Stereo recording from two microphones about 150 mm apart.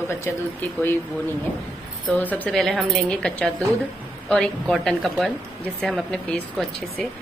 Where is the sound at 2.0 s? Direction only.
10° left (ahead or behind).